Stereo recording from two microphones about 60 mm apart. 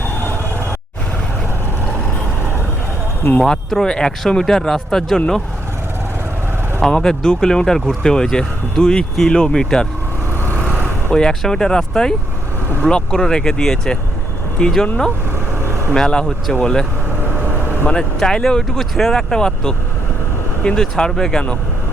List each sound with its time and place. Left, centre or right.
3.2 s speech: left
3.7 s speech: centre
6.8 s speech: centre
11.1 s speech: centre
16.0 s speech: centre
17.8 s speech: centre